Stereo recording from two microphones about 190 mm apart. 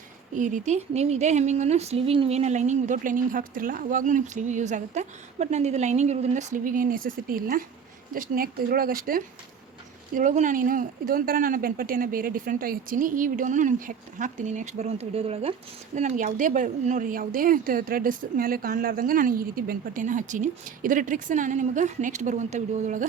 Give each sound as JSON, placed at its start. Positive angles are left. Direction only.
{"t": 0.3, "sound": "a woman's voice", "side_deg": -40}
{"t": 16.0, "sound": "a woman's voice", "side_deg": -40}